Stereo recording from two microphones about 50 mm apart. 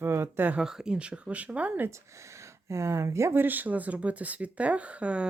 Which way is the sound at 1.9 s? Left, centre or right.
Right.